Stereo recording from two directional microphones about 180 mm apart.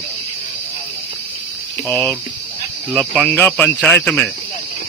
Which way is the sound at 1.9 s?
15° left (ahead or behind).